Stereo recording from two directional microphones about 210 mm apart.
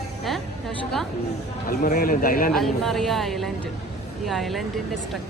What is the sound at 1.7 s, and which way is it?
Speech, 45° left (ahead or behind).